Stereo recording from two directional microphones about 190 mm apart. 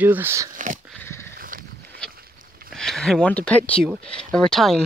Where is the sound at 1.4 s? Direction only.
50° right (ahead or behind).